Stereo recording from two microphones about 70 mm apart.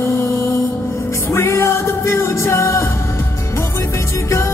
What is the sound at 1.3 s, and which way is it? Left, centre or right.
Music, left.